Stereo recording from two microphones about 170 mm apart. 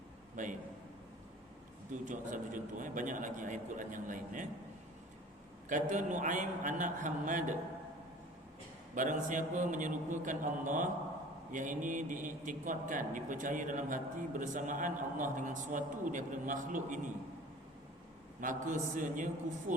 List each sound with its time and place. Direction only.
0.4 s a man's voice: 45° right (ahead or behind)
2.0 s a man's voice: 50° right (ahead or behind)
5.6 s a man's voice: 50° right (ahead or behind)
9.0 s a man's voice: 50° right (ahead or behind)
18.3 s a man's voice: 50° right (ahead or behind)